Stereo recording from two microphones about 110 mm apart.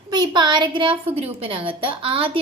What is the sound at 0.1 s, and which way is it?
A woman's voice, 40° right (ahead or behind).